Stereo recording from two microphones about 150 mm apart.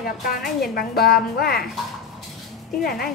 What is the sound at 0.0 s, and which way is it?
Speech, 75° left (ahead or behind).